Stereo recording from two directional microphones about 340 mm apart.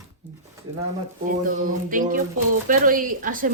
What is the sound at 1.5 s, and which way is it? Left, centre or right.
Speech, right.